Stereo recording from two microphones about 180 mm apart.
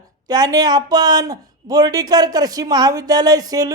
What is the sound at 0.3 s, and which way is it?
Speech, 20° right (ahead or behind).